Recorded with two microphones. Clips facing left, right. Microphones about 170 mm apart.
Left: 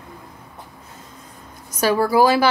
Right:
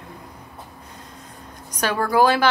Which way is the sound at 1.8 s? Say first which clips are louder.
Left 3 dB; 5° left (ahead or behind).